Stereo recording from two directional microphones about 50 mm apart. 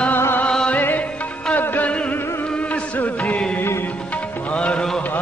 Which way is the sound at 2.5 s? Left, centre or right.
Left.